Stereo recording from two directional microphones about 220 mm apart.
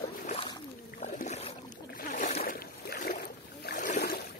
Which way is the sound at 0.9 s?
35° left (ahead or behind).